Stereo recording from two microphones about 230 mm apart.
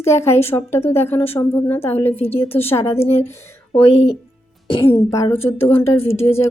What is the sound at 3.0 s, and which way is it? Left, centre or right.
Speech, left.